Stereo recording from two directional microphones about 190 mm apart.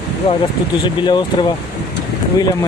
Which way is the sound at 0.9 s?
25° left (ahead or behind).